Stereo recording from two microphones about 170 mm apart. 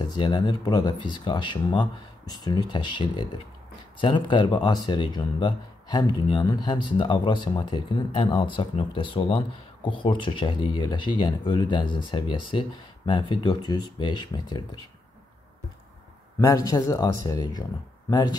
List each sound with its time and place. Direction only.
0.2 s speech: 25° left (ahead or behind)
16.3 s speech: 20° left (ahead or behind)